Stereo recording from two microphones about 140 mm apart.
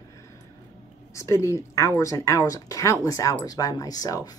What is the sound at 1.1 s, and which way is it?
Speech, 20° left (ahead or behind).